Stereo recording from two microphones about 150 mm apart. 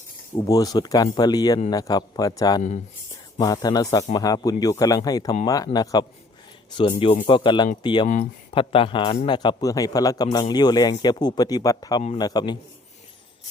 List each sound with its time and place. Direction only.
0.3 s a man's voice: 25° left (ahead or behind)
2.6 s speech: 50° left (ahead or behind)
3.4 s a man's voice: 25° left (ahead or behind)
7.3 s speech: 30° left (ahead or behind)
8.0 s speech: 55° left (ahead or behind)
8.4 s a man's voice: 35° left (ahead or behind)